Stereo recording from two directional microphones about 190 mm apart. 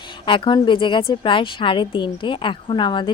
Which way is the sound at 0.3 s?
25° left (ahead or behind).